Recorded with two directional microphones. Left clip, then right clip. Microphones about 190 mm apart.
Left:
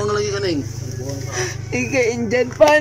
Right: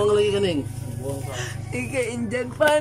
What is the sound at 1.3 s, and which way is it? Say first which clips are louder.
Speech: left 8 dB; 25° left (ahead or behind).